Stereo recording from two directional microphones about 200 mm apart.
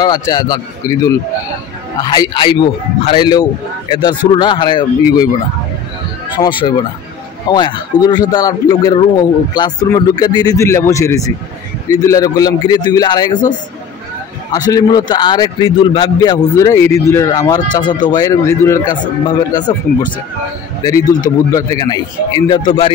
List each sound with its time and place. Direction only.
0.0 s a man's voice: 20° left (ahead or behind)
6.4 s a man's voice: 20° left (ahead or behind)
14.5 s a man's voice: 20° left (ahead or behind)